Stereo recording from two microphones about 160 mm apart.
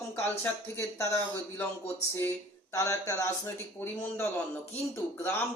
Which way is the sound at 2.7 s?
20° left (ahead or behind).